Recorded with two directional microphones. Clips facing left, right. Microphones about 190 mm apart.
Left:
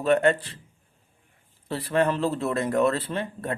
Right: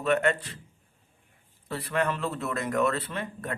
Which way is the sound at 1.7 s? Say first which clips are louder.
Left 5 dB; 30° left (ahead or behind).